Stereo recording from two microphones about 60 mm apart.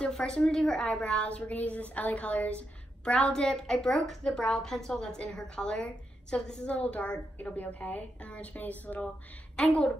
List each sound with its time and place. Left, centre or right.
0.0 s a woman's voice: centre
3.1 s a woman's voice: centre
9.6 s a woman's voice: centre